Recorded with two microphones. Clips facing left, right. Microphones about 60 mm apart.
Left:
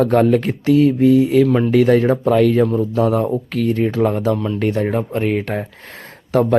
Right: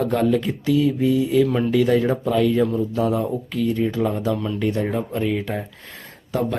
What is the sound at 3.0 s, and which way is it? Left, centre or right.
Speech, left.